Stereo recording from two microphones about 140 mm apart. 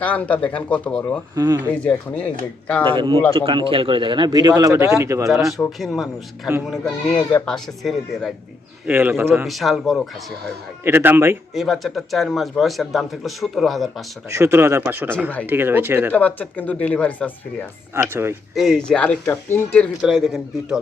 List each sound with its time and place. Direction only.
0.0 s speech: 10° left (ahead or behind)
3.3 s speech: 40° right (ahead or behind); by 5.3 s 20° right (ahead or behind)
5.3 s speech: centre (ahead or behind)
8.9 s speech: 15° right (ahead or behind)
9.5 s speech: centre (ahead or behind)
10.8 s speech: 15° right (ahead or behind)
11.5 s speech: centre (ahead or behind)
14.3 s speech: 20° right (ahead or behind)
16.1 s speech: 10° left (ahead or behind)
17.9 s speech: 15° right (ahead or behind)
18.5 s speech: centre (ahead or behind)
20.0 s speech: centre (ahead or behind)